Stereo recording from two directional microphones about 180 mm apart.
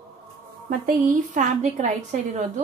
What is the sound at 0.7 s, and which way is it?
A woman's voice, 50° right (ahead or behind).